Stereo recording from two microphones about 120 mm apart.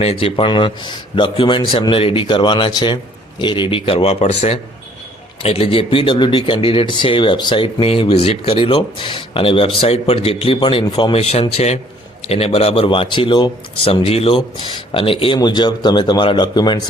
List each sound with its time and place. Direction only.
0.0 s speech: 55° left (ahead or behind)
5.4 s speech: 55° left (ahead or behind); by 16.8 s 35° left (ahead or behind)